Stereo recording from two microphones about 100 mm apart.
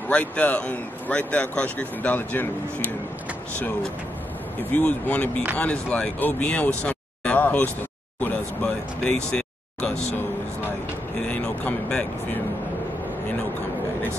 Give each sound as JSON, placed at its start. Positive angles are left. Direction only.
{"t": 0.1, "sound": "speech", "side_deg": 15}
{"t": 4.6, "sound": "speech", "side_deg": 15}
{"t": 11.1, "sound": "speech", "side_deg": 10}